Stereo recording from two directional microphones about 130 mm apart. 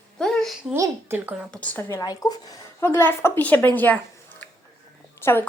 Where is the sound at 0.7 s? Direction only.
25° right (ahead or behind).